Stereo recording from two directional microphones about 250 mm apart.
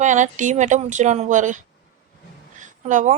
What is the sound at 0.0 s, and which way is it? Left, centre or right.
A woman's voice, right.